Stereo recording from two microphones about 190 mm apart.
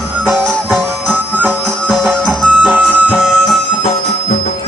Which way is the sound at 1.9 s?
Centre (ahead or behind).